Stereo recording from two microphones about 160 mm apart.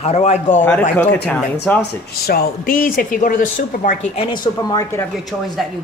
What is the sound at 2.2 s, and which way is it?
Speech, 70° left (ahead or behind).